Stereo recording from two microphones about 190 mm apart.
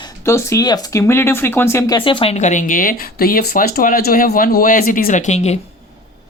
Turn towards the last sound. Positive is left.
turn(degrees=35)  # may be behind; listen again after turning